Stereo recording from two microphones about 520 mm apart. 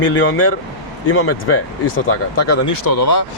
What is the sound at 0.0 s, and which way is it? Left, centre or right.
Speech, left.